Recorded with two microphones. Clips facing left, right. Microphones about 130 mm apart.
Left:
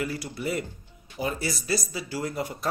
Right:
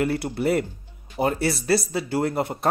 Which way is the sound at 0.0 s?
60° right (ahead or behind).